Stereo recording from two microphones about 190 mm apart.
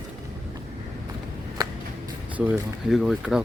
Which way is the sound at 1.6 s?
20° right (ahead or behind).